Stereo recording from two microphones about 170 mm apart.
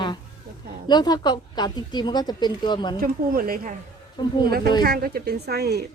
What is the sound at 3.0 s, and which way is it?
Speech, 60° right (ahead or behind).